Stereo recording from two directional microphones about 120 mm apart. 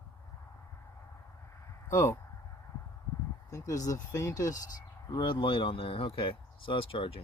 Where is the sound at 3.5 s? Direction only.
30° left (ahead or behind); by 7.2 s 50° left (ahead or behind).